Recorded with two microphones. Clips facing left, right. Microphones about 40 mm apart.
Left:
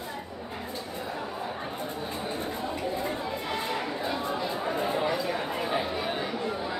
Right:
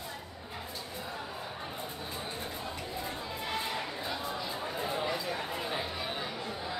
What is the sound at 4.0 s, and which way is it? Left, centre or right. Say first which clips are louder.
Chatter: left 6 dB; centre.